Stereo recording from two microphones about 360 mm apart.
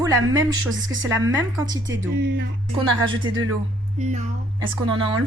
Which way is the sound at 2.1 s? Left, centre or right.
Right.